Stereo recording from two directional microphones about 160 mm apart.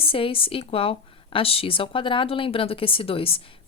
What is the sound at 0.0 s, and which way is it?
A woman's voice, 35° left (ahead or behind).